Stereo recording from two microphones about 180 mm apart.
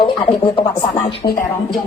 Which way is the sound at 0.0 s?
25° left (ahead or behind).